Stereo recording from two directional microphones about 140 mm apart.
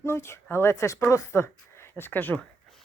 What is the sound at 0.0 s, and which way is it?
A woman's voice, 20° left (ahead or behind).